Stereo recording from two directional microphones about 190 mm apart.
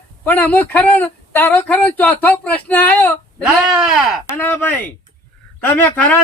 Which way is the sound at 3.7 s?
Centre (ahead or behind).